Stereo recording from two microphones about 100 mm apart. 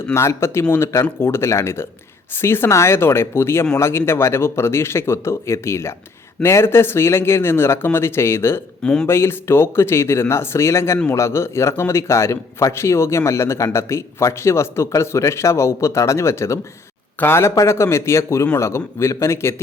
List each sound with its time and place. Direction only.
0.1 s a man's voice: 25° left (ahead or behind)
8.8 s speech: 10° left (ahead or behind)
9.0 s a man's voice: 25° left (ahead or behind)